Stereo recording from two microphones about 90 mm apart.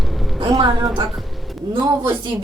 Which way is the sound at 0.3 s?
70° right (ahead or behind).